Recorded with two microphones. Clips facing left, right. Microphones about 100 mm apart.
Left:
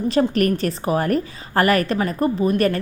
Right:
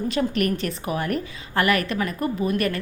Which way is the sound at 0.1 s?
40° left (ahead or behind).